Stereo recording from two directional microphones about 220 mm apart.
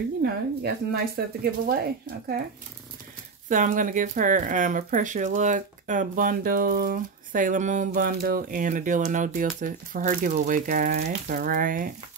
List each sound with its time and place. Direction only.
0.2 s speech: 45° right (ahead or behind)
3.4 s speech: 35° right (ahead or behind)